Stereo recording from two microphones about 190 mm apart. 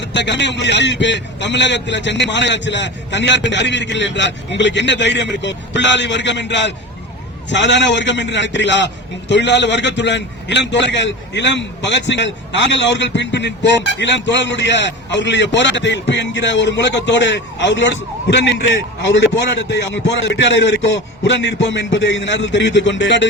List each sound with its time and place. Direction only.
0.0 s a man's voice: 65° left (ahead or behind)